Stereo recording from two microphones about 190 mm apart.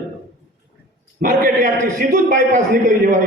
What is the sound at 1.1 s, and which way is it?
A man's voice, 45° right (ahead or behind).